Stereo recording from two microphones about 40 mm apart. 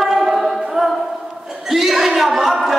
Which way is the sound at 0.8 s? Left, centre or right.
Centre.